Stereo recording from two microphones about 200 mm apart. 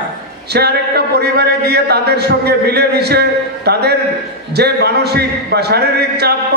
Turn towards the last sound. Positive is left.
turn(degrees=-55)  # may be behind; listen again after turning